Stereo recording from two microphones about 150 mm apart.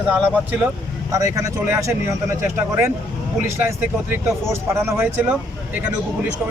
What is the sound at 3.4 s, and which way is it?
Speech, 15° right (ahead or behind).